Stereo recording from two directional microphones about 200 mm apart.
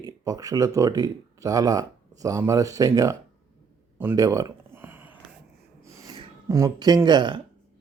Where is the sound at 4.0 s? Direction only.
15° right (ahead or behind).